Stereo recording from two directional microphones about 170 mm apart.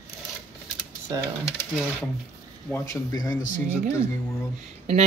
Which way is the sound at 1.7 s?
Centre (ahead or behind).